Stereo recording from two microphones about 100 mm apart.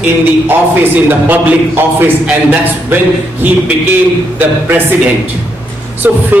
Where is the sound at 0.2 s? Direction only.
20° right (ahead or behind).